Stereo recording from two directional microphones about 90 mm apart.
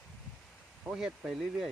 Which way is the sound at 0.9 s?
10° right (ahead or behind).